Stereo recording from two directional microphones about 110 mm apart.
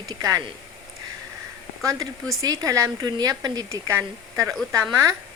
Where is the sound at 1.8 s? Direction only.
30° right (ahead or behind).